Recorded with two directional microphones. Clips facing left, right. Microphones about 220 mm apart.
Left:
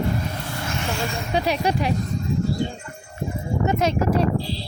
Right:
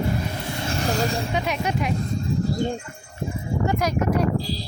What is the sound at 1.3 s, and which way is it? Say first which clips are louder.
Speech: left 3 dB; 35° left (ahead or behind).